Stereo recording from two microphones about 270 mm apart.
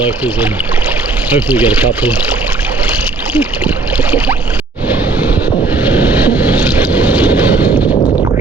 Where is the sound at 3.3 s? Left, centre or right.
Centre.